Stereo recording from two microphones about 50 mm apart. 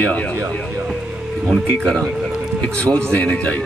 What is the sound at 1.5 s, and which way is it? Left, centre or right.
Speech, centre.